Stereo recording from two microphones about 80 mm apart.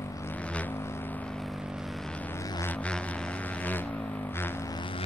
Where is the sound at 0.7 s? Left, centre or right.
Left.